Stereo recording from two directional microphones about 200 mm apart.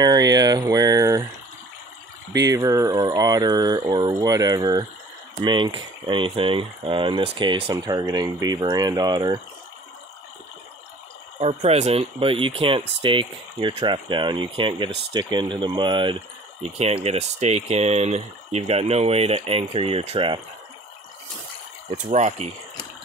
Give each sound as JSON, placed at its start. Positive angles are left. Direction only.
{"t": 0.0, "sound": "speech", "side_deg": -20}
{"t": 2.5, "sound": "speech", "side_deg": -15}
{"t": 11.3, "sound": "speech", "side_deg": -30}
{"t": 21.9, "sound": "speech", "side_deg": -35}